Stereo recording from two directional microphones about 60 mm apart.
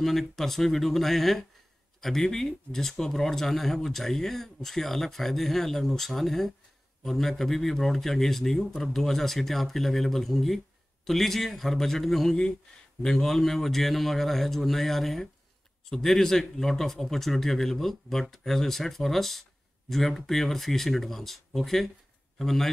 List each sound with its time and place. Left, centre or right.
0.0 s speech: centre